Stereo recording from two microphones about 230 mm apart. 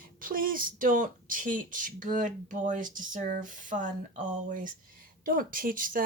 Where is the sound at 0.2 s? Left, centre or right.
Right.